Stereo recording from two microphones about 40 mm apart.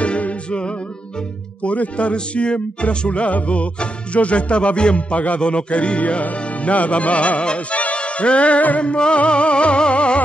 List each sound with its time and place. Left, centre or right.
0.0 s music: left
8.9 s music: left